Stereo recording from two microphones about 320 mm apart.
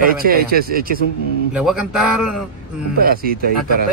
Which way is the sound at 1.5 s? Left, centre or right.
Centre.